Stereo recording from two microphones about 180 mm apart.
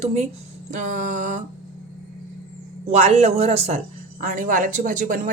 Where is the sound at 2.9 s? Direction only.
35° right (ahead or behind).